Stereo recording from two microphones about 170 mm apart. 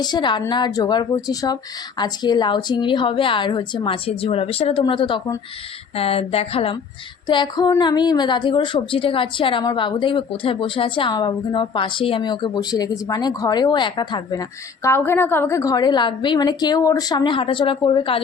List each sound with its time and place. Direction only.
0.0 s a woman's voice: 25° left (ahead or behind)
14.8 s a woman's voice: 15° left (ahead or behind); by 18.2 s 30° left (ahead or behind)